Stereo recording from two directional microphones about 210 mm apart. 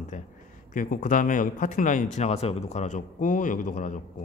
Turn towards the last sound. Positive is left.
turn(degrees=40)  # may be behind; listen again after turning